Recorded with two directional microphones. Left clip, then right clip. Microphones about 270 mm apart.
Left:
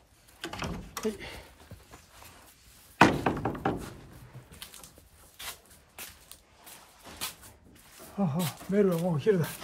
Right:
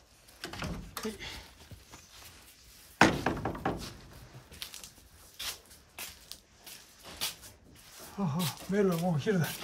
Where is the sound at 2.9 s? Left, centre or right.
Left.